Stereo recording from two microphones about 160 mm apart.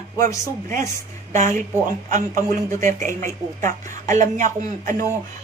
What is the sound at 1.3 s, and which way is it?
Speech, 50° right (ahead or behind).